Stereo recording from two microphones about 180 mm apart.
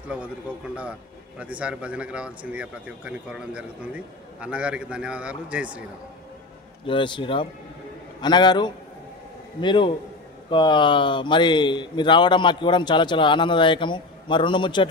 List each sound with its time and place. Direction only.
0.5 s speech: 5° right (ahead or behind)
6.9 s speech: 25° left (ahead or behind)